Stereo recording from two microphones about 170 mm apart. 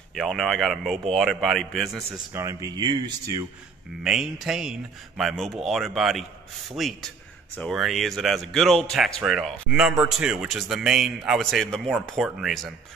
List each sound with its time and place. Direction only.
0.1 s a man's voice: centre (ahead or behind)
2.3 s speech: 20° right (ahead or behind)
4.0 s a man's voice: 5° right (ahead or behind)